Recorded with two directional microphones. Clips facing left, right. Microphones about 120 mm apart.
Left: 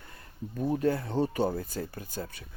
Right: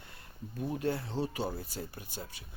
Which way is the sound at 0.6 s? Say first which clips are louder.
Left 6 dB; 40° left (ahead or behind).